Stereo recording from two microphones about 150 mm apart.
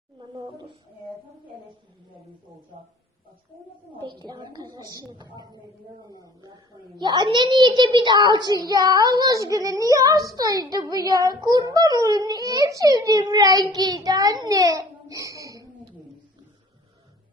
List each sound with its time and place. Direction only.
4.2 s a child's voice: 30° right (ahead or behind)